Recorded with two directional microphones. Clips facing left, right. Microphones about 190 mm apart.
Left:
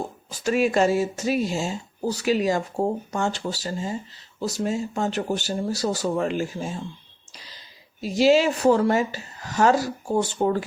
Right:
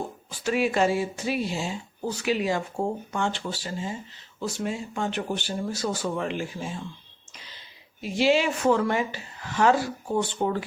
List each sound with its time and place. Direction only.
0.3 s speech: 40° left (ahead or behind)
7.3 s a sound: 35° left (ahead or behind)
8.0 s speech: 40° left (ahead or behind)